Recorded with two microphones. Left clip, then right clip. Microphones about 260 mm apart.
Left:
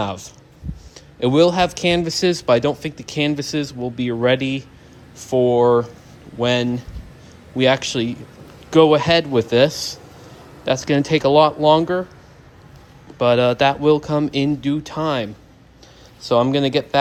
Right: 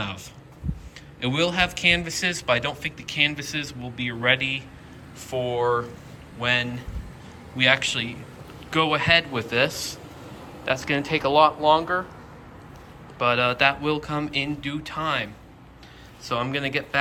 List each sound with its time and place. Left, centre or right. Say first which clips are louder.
0.0 s speech: left 8 dB; centre; by 11.9 s left
13.1 s speech: left 6 dB; left